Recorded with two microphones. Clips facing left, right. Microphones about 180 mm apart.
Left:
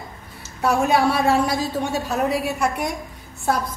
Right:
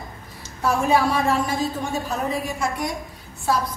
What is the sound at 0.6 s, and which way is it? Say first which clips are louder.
Speech: left 1 dB; 75° left (ahead or behind).